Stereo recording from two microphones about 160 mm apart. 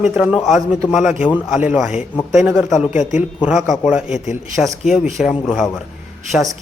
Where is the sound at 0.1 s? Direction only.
5° right (ahead or behind).